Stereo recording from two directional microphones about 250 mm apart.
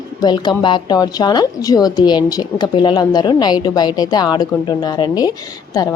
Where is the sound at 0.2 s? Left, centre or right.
Centre.